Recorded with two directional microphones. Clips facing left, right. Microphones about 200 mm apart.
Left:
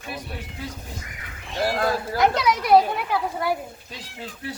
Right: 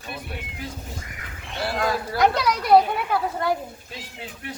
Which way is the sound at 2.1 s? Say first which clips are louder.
Right 1 dB; centre (ahead or behind).